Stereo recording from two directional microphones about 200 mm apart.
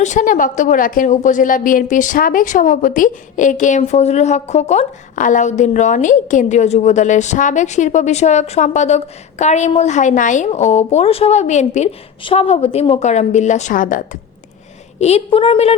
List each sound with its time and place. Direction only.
0.0 s a woman's voice: 40° left (ahead or behind)
15.0 s a woman's voice: 30° left (ahead or behind)